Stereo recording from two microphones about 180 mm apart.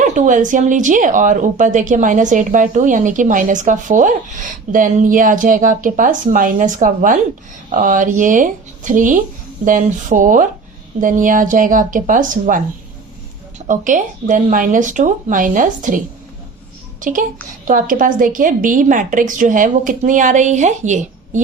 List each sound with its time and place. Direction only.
0.0 s speech: 45° right (ahead or behind)
13.7 s speech: 45° right (ahead or behind)
17.0 s a child's voice: 45° right (ahead or behind)